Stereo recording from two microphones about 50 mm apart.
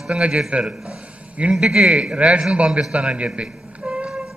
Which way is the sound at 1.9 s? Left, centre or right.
Right.